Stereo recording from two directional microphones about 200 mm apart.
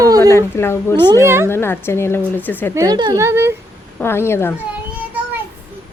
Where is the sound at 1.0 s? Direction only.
15° right (ahead or behind).